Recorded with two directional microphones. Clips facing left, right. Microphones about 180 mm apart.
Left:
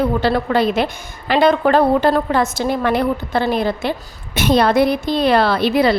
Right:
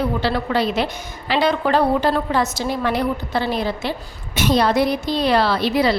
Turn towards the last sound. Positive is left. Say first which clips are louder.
# left 3 dB
turn(degrees=55)  # may be behind; listen again after turning